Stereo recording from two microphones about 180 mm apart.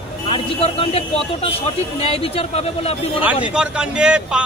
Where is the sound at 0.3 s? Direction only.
30° left (ahead or behind).